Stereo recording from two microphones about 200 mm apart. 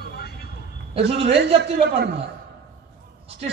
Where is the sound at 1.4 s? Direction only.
55° right (ahead or behind).